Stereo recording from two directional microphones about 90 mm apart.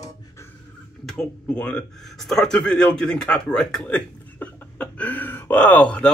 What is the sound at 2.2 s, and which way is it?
A man's voice, 5° left (ahead or behind).